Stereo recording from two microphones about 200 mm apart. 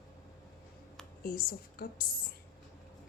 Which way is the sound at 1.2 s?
45° left (ahead or behind).